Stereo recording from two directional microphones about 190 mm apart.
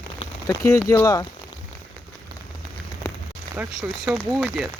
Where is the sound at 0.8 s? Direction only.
15° left (ahead or behind).